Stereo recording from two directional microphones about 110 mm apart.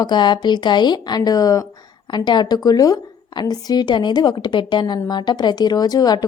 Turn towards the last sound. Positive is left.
turn(degrees=35)  # may be behind; listen again after turning